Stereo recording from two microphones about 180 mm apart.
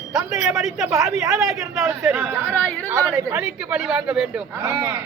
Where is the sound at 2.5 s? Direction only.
5° left (ahead or behind).